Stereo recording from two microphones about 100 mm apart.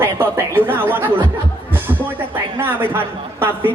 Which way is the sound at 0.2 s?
20° right (ahead or behind).